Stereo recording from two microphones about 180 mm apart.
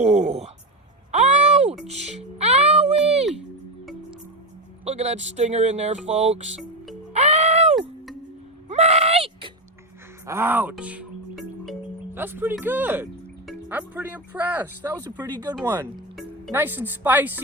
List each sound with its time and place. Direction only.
0.0 s speech: 40° right (ahead or behind)
1.1 s a sound: 40° right (ahead or behind)
1.9 s music: 35° right (ahead or behind)
4.9 s speech: 35° right (ahead or behind)
7.1 s music: 35° right (ahead or behind)
8.7 s a sound: 35° right (ahead or behind)
10.2 s speech: 15° right (ahead or behind)
12.1 s speech: 10° right (ahead or behind)